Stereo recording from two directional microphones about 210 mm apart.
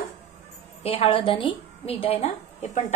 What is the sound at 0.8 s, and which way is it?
A woman's voice, 25° left (ahead or behind).